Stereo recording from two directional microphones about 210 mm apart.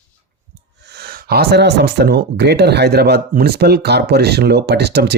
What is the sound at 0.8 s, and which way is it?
Speech, 50° right (ahead or behind).